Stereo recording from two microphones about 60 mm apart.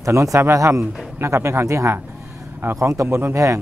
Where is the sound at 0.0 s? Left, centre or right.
Right.